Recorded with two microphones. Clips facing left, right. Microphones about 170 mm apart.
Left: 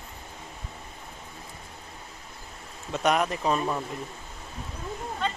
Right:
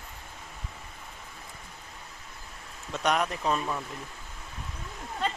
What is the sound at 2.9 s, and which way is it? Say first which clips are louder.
Speech: left 3 dB; 5° left (ahead or behind).